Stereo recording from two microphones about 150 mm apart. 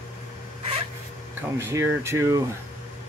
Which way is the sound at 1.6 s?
15° right (ahead or behind).